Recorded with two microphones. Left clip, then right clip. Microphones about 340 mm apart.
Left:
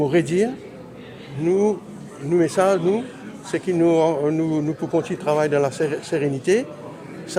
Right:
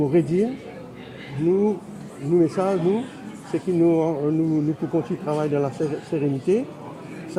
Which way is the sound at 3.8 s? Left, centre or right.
Left.